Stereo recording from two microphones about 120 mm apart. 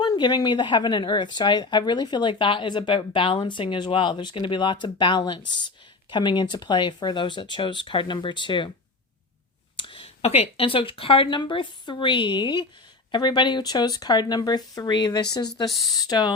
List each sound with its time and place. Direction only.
0.0 s speech: 35° left (ahead or behind)
9.7 s speech: 45° left (ahead or behind)